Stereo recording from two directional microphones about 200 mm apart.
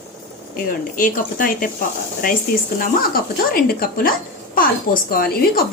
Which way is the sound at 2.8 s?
45° left (ahead or behind).